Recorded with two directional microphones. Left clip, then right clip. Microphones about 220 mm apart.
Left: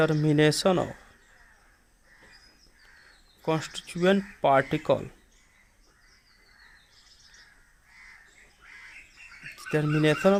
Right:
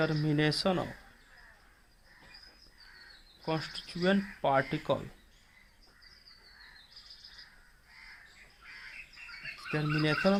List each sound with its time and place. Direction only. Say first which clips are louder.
0.0 s speech: left 8 dB; 40° left (ahead or behind)
3.4 s speech: left 6 dB; 40° left (ahead or behind)
9.7 s speech: left 6 dB; 45° left (ahead or behind)